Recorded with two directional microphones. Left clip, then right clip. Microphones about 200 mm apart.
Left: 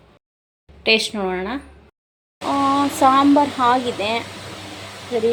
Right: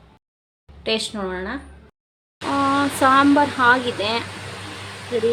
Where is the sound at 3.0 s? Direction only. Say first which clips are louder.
Left 1 dB; centre (ahead or behind).